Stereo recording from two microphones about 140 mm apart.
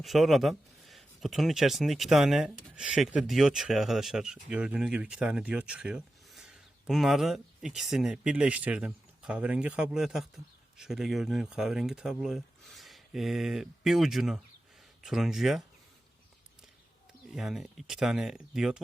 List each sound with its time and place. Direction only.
0.0 s speech: centre (ahead or behind)
17.3 s speech: centre (ahead or behind)